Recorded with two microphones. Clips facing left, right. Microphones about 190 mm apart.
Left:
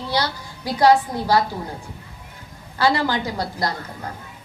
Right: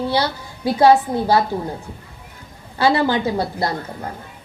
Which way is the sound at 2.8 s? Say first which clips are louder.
Right 3 dB; 20° right (ahead or behind).